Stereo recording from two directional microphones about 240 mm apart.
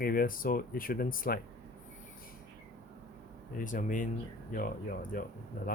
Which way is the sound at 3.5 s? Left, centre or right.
Left.